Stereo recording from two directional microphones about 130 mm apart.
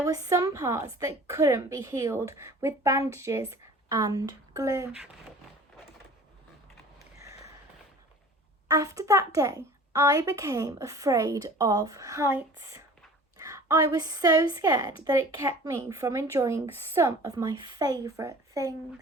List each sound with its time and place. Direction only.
0.0 s a child's voice: 25° right (ahead or behind)
8.6 s a child's voice: 25° right (ahead or behind)